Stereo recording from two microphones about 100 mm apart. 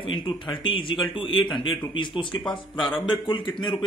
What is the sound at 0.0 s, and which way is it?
Speech, 55° left (ahead or behind).